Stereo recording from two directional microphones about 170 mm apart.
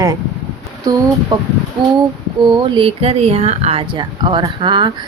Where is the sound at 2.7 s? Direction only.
35° right (ahead or behind).